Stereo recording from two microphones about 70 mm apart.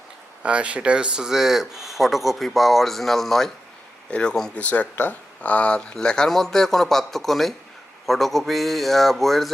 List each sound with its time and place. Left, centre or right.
0.4 s speech: centre